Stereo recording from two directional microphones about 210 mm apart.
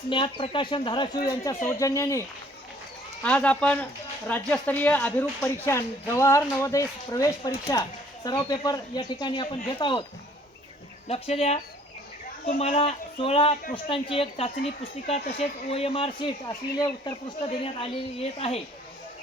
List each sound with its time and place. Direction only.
0.1 s speech: 25° left (ahead or behind)
3.2 s speech: 5° left (ahead or behind); by 10.1 s 25° left (ahead or behind)
11.1 s speech: 30° left (ahead or behind)